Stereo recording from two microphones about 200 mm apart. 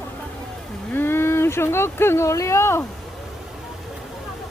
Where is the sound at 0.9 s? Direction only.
10° left (ahead or behind).